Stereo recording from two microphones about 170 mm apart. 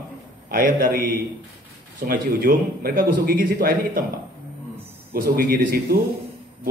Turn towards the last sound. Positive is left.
turn(degrees=-60)  # may be behind; listen again after turning